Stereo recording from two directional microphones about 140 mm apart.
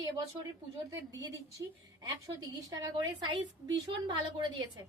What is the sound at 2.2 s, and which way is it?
A woman's voice, 25° right (ahead or behind).